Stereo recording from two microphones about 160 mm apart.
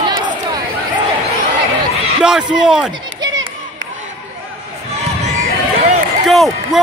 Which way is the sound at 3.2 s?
25° right (ahead or behind).